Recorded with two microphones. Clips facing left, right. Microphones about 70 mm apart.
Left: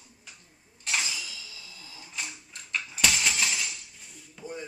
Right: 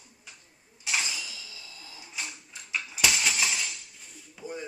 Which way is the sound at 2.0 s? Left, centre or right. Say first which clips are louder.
Even; centre.